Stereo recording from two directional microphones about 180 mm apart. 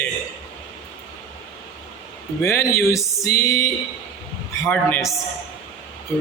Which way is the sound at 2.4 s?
15° left (ahead or behind).